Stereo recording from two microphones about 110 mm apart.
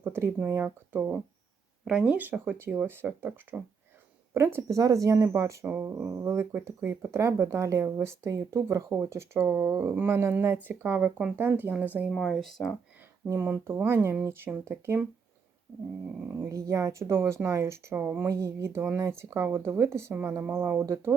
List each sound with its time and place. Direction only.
0.0 s speech: 20° right (ahead or behind)
12.1 s speech: 5° left (ahead or behind)
13.2 s speech: 20° right (ahead or behind)
16.3 s speech: 25° right (ahead or behind)